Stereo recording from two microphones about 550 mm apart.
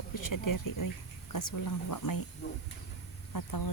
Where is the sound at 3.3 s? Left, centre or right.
Left.